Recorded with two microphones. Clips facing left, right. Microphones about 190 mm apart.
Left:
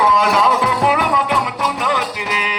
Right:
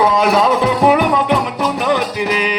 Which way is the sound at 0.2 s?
25° right (ahead or behind).